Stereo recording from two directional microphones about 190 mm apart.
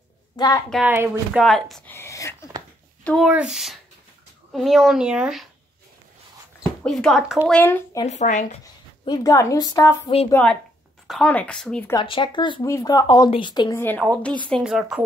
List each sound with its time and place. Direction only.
0.4 s speech: 20° left (ahead or behind)
0.8 s speech: 10° right (ahead or behind)
1.4 s speech: centre (ahead or behind)
3.0 s a sound: 10° left (ahead or behind)
4.5 s speech: centre (ahead or behind)
6.6 s speech: 5° left (ahead or behind)
8.1 s speech: 40° left (ahead or behind)
9.0 s speech: 20° left (ahead or behind)
10.3 s speech: 5° left (ahead or behind)
11.9 s speech: 25° left (ahead or behind)
13.7 s a woman's voice: 10° left (ahead or behind)